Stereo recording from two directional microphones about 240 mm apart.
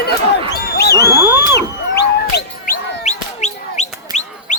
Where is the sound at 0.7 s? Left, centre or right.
Left.